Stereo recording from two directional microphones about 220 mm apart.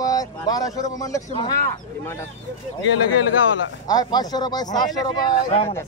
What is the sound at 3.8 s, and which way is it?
Speech, 15° left (ahead or behind).